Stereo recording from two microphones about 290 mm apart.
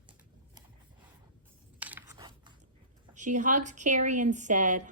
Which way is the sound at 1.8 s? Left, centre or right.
Centre.